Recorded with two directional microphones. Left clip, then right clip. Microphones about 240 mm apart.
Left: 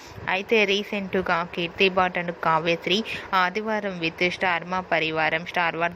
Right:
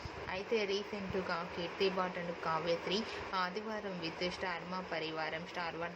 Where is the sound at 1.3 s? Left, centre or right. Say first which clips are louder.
Left 14 dB; left.